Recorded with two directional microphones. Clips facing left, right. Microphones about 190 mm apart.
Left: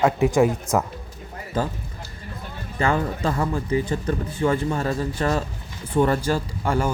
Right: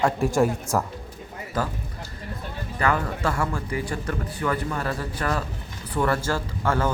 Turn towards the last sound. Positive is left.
turn(degrees=15)  # may be behind; listen again after turning